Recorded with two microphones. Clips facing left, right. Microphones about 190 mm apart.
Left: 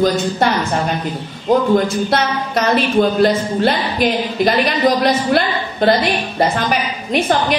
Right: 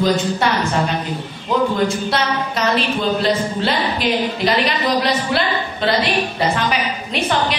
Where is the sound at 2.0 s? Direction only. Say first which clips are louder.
Left 2 dB; 50° left (ahead or behind).